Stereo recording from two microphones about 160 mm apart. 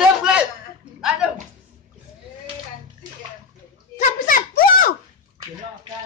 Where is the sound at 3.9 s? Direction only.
60° left (ahead or behind).